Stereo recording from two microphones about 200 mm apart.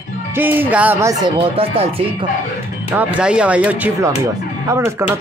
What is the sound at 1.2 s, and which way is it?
Speech, 30° right (ahead or behind).